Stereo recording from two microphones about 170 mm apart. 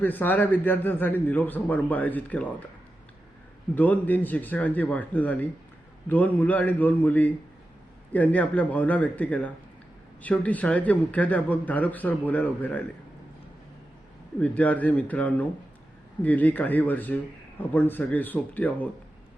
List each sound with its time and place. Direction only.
0.0 s a man's voice: 10° left (ahead or behind)
3.8 s a man's voice: 10° left (ahead or behind)
14.3 s a man's voice: 10° left (ahead or behind)